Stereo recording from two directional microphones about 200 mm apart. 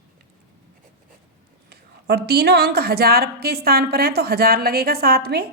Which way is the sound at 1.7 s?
50° right (ahead or behind).